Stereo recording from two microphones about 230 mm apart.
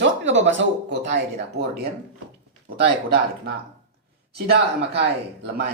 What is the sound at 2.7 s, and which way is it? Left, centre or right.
Speech, right.